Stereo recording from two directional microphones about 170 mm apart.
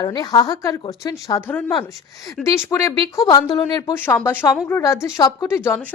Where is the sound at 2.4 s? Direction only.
Centre (ahead or behind).